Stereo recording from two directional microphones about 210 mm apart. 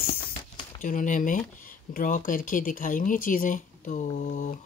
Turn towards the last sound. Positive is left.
turn(degrees=40)  # may be behind; listen again after turning